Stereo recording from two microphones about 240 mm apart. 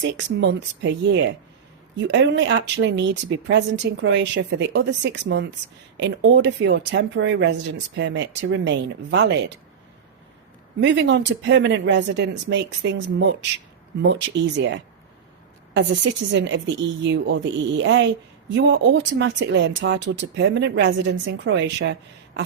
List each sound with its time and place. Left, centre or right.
0.1 s a woman's voice: right
10.8 s a woman's voice: right
14.3 s a woman's voice: right
15.7 s a woman's voice: right